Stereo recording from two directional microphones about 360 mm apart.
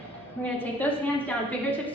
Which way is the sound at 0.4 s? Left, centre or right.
Centre.